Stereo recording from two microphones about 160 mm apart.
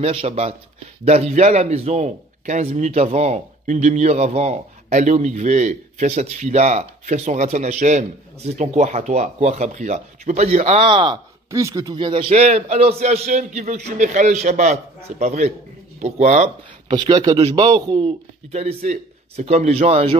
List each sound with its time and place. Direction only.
0.0 s a man's voice: 35° right (ahead or behind)
11.5 s a man's voice: 20° right (ahead or behind); by 16.4 s 45° right (ahead or behind)
16.8 s speech: 30° right (ahead or behind)
17.8 s speech: 35° right (ahead or behind)